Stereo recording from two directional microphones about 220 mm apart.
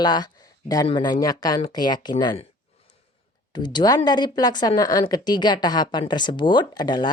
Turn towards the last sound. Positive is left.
turn(degrees=20)  # may be behind; listen again after turning